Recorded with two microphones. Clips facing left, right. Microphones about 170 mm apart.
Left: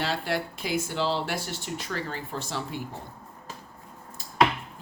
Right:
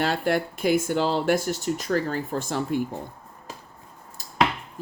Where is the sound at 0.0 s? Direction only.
50° right (ahead or behind).